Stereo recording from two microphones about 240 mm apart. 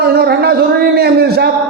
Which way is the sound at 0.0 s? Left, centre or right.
Right.